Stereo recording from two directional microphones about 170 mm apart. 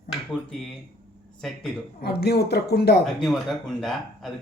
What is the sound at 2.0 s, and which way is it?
Speech, 70° left (ahead or behind).